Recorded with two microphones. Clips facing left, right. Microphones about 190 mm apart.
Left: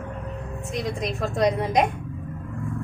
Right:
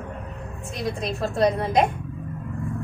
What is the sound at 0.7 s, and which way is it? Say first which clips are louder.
A woman's voice: even; 15° left (ahead or behind).